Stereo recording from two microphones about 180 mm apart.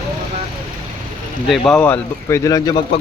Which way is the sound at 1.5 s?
Centre (ahead or behind).